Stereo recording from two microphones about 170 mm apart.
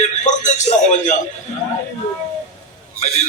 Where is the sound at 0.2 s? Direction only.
45° left (ahead or behind).